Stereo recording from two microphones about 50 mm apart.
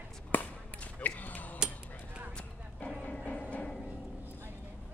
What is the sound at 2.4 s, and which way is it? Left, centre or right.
Music, centre.